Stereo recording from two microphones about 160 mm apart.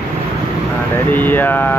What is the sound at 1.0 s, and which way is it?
Speech, 10° left (ahead or behind).